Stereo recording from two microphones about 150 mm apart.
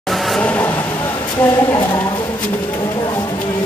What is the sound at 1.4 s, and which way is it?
Speech, 15° left (ahead or behind).